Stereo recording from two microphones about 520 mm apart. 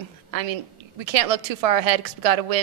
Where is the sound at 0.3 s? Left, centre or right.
Right.